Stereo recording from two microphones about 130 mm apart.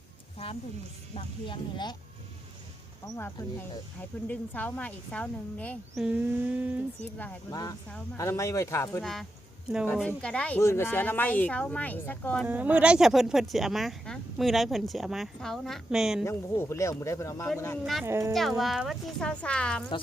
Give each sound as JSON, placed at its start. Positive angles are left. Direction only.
{"t": 1.1, "sound": "speech", "side_deg": 35}
{"t": 4.3, "sound": "speech", "side_deg": 15}
{"t": 6.0, "sound": "a sound", "side_deg": -10}
{"t": 7.5, "sound": "speech", "side_deg": 30}
{"t": 9.0, "sound": "speech", "side_deg": 0}
{"t": 10.1, "sound": "speech", "side_deg": 10}
{"t": 10.6, "sound": "speech", "side_deg": 20}
{"t": 12.5, "sound": "speech", "side_deg": -10}
{"t": 16.2, "sound": "speech", "side_deg": 20}
{"t": 18.0, "sound": "speech", "side_deg": -20}
{"t": 18.3, "sound": "speech", "side_deg": 0}